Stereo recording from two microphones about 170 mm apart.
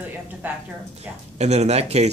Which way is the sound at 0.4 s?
10° right (ahead or behind).